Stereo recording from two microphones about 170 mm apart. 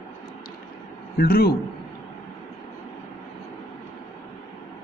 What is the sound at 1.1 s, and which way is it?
Speech, 60° left (ahead or behind).